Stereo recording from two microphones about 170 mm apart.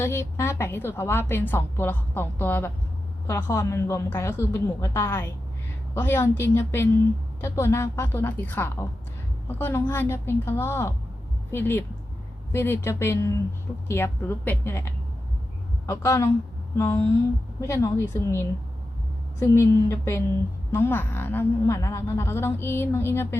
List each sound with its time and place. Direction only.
0.0 s a woman's voice: 15° left (ahead or behind)
15.9 s a woman's voice: 15° left (ahead or behind)
19.4 s a woman's voice: 15° left (ahead or behind)